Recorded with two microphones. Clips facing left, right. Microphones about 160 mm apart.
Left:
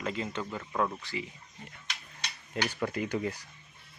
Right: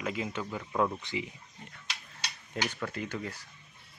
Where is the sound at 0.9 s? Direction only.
20° right (ahead or behind).